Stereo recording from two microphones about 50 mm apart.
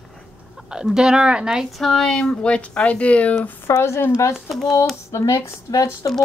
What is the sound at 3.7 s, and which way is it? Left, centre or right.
Speech, left.